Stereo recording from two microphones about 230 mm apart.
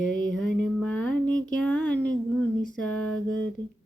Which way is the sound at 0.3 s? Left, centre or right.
Centre.